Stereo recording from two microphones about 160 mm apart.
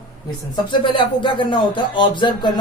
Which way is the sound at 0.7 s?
30° left (ahead or behind).